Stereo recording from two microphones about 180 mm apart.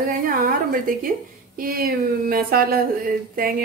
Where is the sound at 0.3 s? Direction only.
50° right (ahead or behind).